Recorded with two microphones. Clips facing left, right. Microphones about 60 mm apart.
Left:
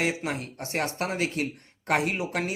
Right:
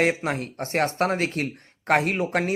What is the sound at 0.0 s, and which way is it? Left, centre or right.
Speech, right.